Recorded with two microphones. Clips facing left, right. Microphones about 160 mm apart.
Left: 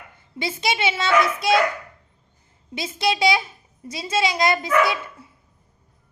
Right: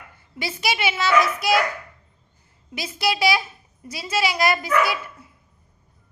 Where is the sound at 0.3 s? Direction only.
25° left (ahead or behind).